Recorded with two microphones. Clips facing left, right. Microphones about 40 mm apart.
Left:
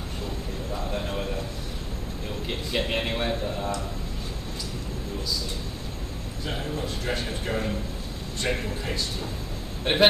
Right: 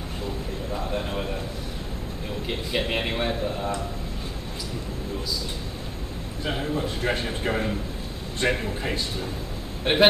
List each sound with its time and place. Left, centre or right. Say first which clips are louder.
0.7 s a sound: right 2 dB; centre
2.4 s a man's voice: right 1 dB; centre
6.5 s a man's voice: right 4 dB; centre